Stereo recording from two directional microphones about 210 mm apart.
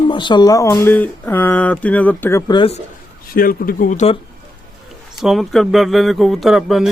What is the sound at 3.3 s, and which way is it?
Speech, 45° left (ahead or behind).